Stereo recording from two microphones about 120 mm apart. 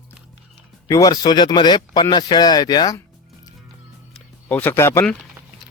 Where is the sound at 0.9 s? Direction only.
30° left (ahead or behind).